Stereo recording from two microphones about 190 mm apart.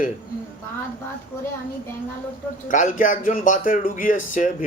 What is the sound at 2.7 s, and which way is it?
A man's voice, 40° left (ahead or behind).